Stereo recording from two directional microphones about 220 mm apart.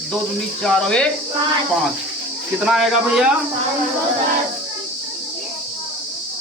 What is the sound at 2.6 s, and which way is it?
Speech, centre (ahead or behind).